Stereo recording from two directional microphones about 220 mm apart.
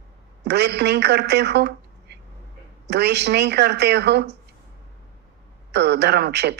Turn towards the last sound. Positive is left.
turn(degrees=-50)  # may be behind; listen again after turning